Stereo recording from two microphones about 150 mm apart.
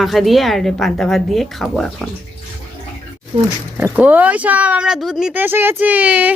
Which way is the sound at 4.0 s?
10° right (ahead or behind).